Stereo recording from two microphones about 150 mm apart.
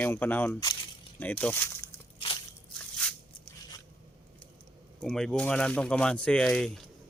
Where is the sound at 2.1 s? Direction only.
35° left (ahead or behind).